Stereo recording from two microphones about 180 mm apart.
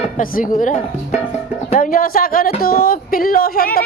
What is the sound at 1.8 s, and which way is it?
Speech, 50° left (ahead or behind).